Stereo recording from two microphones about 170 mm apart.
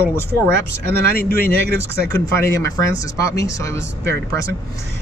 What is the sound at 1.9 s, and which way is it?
Speech, 15° left (ahead or behind).